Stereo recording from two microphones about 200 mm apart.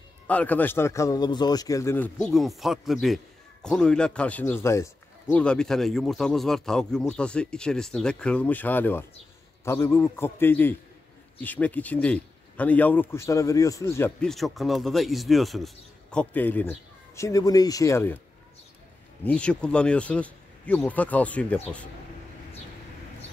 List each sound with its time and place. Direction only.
0.3 s speech: 5° left (ahead or behind)
2.1 s speech: centre (ahead or behind)
19.2 s speech: 5° left (ahead or behind)